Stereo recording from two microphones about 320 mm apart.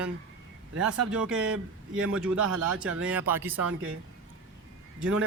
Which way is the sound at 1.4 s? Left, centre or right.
Right.